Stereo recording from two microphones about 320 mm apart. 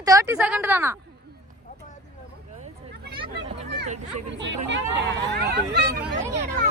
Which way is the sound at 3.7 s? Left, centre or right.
Right.